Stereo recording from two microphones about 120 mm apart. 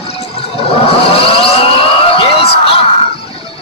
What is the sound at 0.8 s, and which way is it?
Vehicle, 50° left (ahead or behind).